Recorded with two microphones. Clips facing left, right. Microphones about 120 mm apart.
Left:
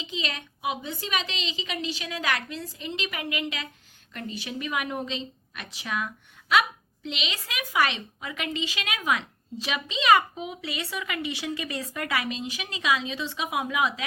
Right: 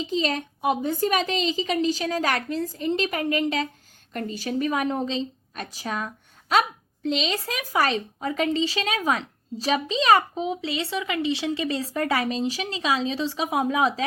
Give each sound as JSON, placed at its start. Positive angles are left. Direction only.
{"t": 0.0, "sound": "a woman's voice", "side_deg": -40}